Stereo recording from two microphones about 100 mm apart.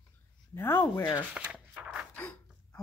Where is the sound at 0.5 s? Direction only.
20° left (ahead or behind).